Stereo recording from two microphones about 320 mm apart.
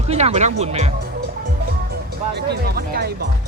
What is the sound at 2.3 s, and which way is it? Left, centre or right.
Speech, right.